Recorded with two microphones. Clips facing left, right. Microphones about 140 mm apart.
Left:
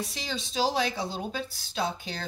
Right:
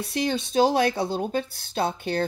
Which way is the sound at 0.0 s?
60° right (ahead or behind).